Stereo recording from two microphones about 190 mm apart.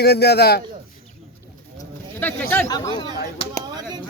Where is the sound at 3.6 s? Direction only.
20° right (ahead or behind).